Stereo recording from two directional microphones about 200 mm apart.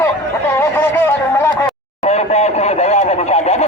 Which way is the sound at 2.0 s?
30° left (ahead or behind).